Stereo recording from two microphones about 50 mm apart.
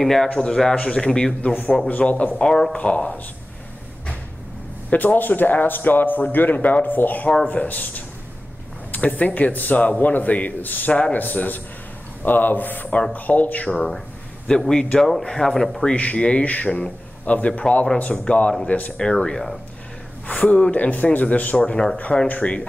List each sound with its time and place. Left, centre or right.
0.0 s speech: centre
1.9 s speech: left
2.4 s speech: centre
2.8 s speech: left
4.8 s a man's voice: left
11.0 s speech: left
11.2 s a man's voice: left
13.7 s speech: centre
15.9 s speech: left
18.7 s a man's voice: left
18.9 s speech: centre
20.3 s a man's voice: left
21.6 s speech: centre
22.3 s speech: left